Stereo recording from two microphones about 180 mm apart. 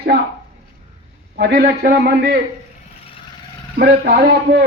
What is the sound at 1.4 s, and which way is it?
A man's voice, 65° right (ahead or behind).